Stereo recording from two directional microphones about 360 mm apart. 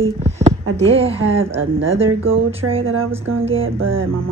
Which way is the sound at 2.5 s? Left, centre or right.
Centre.